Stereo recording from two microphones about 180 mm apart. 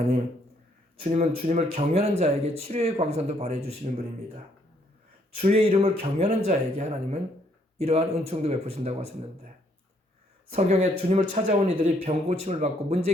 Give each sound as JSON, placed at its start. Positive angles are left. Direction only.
{"t": 1.0, "sound": "speech", "side_deg": -35}
{"t": 5.4, "sound": "speech", "side_deg": -35}
{"t": 10.5, "sound": "speech", "side_deg": -35}